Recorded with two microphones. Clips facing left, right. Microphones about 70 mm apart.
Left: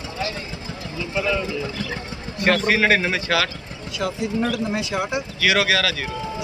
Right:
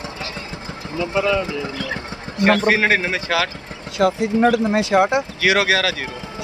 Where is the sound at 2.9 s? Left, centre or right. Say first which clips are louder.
Even; centre.